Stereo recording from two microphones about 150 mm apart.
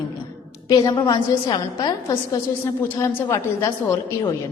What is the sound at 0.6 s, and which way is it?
A woman's voice, 25° left (ahead or behind).